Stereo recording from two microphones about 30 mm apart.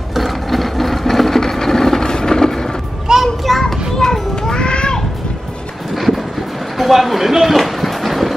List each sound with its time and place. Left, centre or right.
0.1 s wood: centre
3.1 s a sound: right
3.4 s children playing: centre
4.0 s children playing: centre
5.9 s vehicle: centre
6.8 s a sound: centre